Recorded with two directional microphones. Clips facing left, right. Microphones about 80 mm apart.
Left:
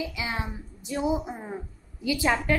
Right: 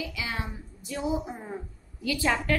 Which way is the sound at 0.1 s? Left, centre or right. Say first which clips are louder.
Left 2 dB; left.